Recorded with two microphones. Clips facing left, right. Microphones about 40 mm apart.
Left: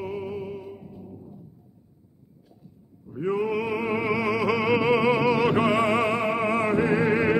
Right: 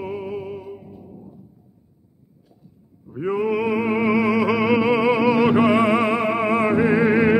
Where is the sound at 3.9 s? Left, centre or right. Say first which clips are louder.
Right 6 dB; centre.